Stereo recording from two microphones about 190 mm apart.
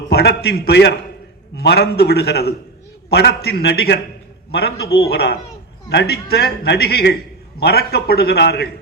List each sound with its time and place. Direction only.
0.1 s a man's voice: 60° left (ahead or behind)